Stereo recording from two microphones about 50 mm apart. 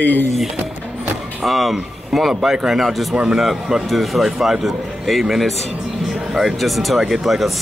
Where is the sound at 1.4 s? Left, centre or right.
Centre.